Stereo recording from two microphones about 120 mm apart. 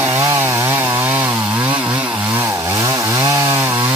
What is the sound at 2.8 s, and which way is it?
Chainsaw, 25° right (ahead or behind).